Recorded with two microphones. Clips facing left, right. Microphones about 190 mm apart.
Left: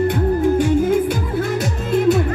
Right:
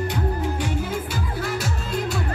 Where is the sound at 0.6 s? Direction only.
50° left (ahead or behind).